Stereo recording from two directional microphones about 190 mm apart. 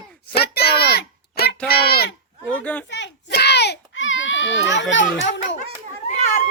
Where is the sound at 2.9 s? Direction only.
65° left (ahead or behind).